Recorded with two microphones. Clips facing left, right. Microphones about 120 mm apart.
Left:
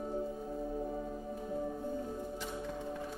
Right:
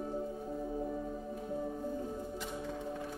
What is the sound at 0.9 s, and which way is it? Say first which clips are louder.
Music: right 1 dB; 10° left (ahead or behind).